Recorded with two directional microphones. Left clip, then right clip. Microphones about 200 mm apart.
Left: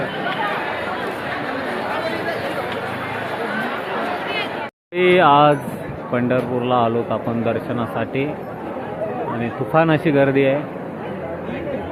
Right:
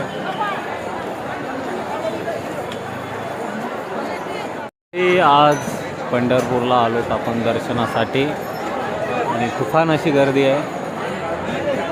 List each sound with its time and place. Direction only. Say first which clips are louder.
4.9 s speech: even; centre (ahead or behind)
6.1 s speech: right 2 dB; 15° right (ahead or behind)
7.8 s speech: right 4 dB; 25° right (ahead or behind)
9.7 s speech: even; 10° right (ahead or behind)